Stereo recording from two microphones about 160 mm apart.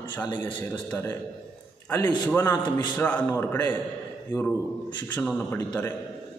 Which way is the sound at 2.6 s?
25° left (ahead or behind).